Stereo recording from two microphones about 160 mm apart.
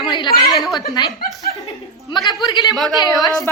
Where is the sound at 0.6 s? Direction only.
Centre (ahead or behind).